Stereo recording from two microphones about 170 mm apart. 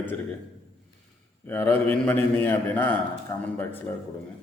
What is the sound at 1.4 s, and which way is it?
A man's voice, 10° left (ahead or behind).